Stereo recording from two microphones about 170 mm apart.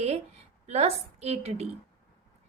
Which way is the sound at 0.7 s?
40° right (ahead or behind).